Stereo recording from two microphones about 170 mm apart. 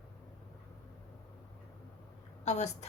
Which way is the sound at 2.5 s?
40° left (ahead or behind).